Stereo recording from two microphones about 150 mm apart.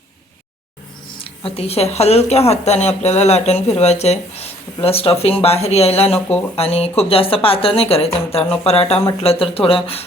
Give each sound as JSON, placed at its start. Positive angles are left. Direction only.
{"t": 1.5, "sound": "speech", "side_deg": 40}
{"t": 6.1, "sound": "speech", "side_deg": 10}
{"t": 6.6, "sound": "a woman's voice", "side_deg": 40}